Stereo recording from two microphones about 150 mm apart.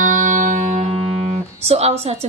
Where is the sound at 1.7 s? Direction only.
45° right (ahead or behind).